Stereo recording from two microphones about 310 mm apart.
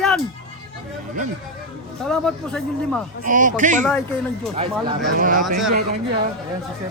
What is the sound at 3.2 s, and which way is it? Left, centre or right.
Speech, right.